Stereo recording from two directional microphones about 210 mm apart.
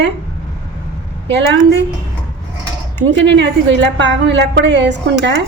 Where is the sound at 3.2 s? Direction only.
55° right (ahead or behind).